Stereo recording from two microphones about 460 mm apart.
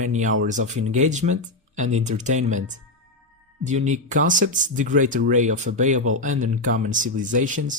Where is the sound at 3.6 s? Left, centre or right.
Centre.